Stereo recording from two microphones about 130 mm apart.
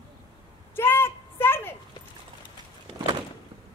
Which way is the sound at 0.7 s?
15° left (ahead or behind).